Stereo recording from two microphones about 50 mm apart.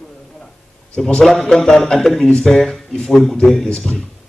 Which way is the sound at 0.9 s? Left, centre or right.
Centre.